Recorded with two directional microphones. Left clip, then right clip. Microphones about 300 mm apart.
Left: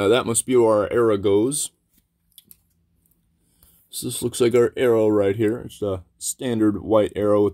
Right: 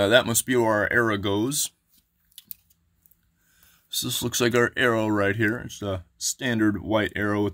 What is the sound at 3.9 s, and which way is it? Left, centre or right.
Speech, right.